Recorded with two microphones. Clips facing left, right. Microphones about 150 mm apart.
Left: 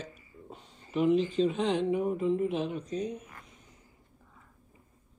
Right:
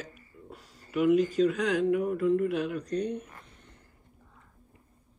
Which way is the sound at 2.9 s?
5° left (ahead or behind).